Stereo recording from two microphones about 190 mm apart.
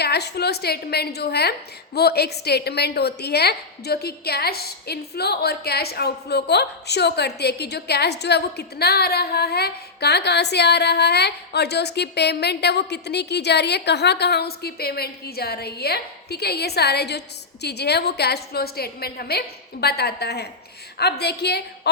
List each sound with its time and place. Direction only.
0.0 s a woman's voice: 60° left (ahead or behind)